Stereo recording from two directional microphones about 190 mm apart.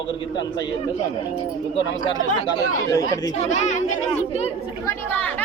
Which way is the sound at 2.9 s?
20° left (ahead or behind).